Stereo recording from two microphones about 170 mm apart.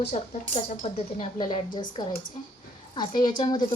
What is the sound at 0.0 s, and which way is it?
Speech, 45° left (ahead or behind).